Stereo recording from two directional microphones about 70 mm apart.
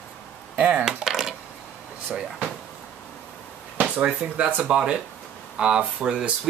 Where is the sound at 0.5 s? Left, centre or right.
Centre.